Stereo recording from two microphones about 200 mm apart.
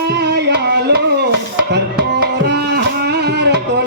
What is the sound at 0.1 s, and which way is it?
Music, 55° right (ahead or behind).